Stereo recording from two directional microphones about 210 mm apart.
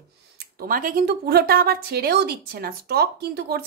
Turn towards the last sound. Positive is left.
turn(degrees=-50)  # may be behind; listen again after turning